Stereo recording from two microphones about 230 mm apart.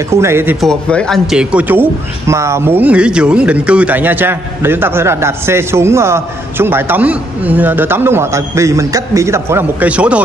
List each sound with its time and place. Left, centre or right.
0.1 s a man's voice: centre
0.6 s a man's voice: centre